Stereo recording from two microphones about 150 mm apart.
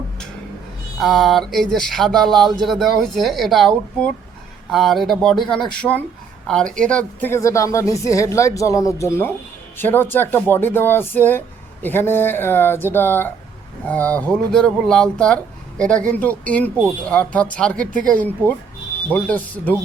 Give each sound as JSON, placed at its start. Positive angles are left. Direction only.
{"t": 0.9, "sound": "speech", "side_deg": 0}
{"t": 4.7, "sound": "speech", "side_deg": 0}